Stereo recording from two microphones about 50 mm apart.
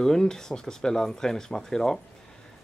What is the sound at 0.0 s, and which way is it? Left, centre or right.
Speech, centre.